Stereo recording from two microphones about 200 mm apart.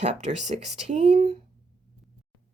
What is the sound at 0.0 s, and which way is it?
Speech, 35° right (ahead or behind).